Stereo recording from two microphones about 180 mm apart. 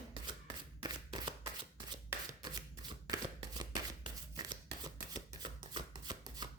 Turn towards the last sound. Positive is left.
turn(degrees=-20)  # may be behind; listen again after turning